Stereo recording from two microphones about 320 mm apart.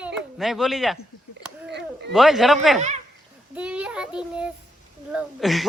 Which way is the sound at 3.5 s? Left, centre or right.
Centre.